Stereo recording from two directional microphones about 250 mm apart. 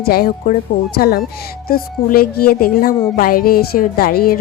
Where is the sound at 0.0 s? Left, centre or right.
Left.